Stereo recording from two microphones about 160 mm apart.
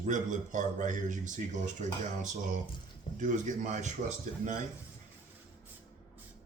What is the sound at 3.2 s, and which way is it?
Speech, 50° right (ahead or behind).